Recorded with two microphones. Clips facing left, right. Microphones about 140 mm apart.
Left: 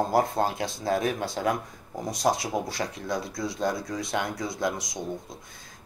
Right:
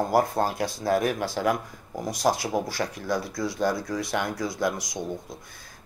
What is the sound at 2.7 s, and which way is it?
Speech, 20° left (ahead or behind).